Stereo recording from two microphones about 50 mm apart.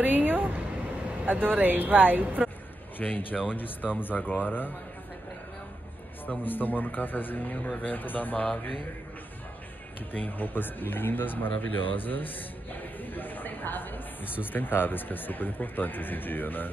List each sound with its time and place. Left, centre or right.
0.0 s a sound: right
1.2 s speech: right
3.0 s speech: left
6.4 s speech: left
10.1 s speech: left
13.0 s a sound: left
14.4 s speech: left